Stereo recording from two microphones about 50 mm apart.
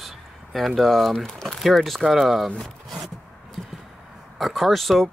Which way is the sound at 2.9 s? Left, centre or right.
Centre.